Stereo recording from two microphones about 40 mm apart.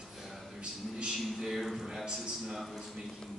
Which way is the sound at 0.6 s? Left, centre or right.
Right.